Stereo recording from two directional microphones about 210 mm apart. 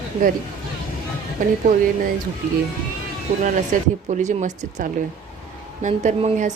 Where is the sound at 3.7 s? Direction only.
40° right (ahead or behind).